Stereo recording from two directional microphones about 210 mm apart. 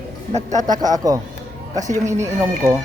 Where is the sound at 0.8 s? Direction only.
15° right (ahead or behind).